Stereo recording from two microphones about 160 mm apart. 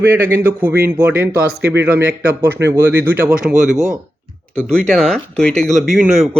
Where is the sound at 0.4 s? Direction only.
10° right (ahead or behind).